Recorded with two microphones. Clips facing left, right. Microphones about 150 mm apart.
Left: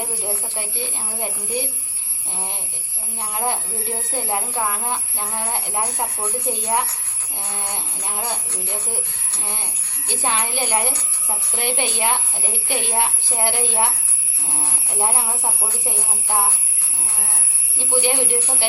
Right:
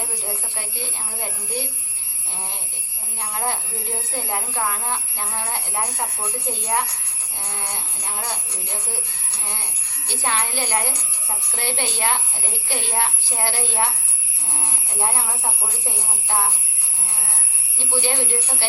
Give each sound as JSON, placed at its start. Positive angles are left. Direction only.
{"t": 0.0, "sound": "speech", "side_deg": 15}
{"t": 3.2, "sound": "speech", "side_deg": 15}
{"t": 10.1, "sound": "speech", "side_deg": 15}
{"t": 17.7, "sound": "speech", "side_deg": 15}